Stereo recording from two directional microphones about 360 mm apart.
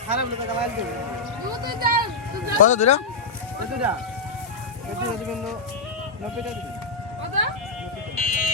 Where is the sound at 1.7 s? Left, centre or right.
Right.